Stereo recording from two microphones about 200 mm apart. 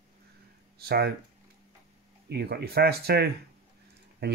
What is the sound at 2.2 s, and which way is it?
Speech, 55° right (ahead or behind).